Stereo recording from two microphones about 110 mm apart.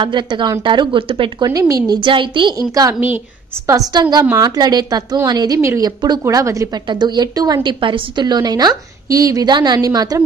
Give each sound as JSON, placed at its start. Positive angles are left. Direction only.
{"t": 0.0, "sound": "speech", "side_deg": -45}
{"t": 1.5, "sound": "a woman's voice", "side_deg": -30}
{"t": 1.9, "sound": "speech", "side_deg": -50}
{"t": 2.7, "sound": "a woman's voice", "side_deg": -30}
{"t": 5.6, "sound": "a woman's voice", "side_deg": -25}
{"t": 5.9, "sound": "a woman's voice", "side_deg": -40}
{"t": 6.2, "sound": "a woman's voice", "side_deg": -30}
{"t": 6.9, "sound": "a woman's voice", "side_deg": -40}
{"t": 7.8, "sound": "a woman's voice", "side_deg": -45}